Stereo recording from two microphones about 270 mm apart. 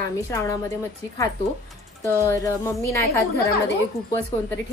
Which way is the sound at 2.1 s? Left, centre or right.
Centre.